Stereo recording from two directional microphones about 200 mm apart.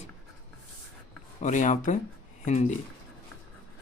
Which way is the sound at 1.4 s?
35° left (ahead or behind).